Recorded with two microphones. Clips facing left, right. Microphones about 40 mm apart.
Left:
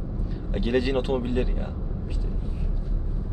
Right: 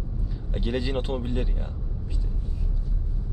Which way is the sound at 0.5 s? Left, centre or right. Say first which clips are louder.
Left 4 dB; left.